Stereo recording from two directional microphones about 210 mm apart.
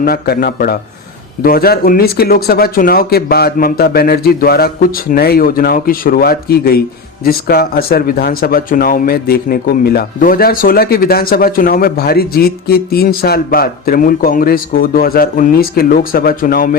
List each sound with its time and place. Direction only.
0.0 s speech: 45° left (ahead or behind)